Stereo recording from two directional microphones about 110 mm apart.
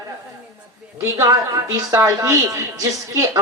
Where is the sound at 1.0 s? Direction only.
30° right (ahead or behind).